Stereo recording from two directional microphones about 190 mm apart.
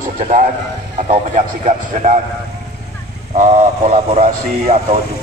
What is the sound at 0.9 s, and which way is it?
A man's voice, 40° right (ahead or behind).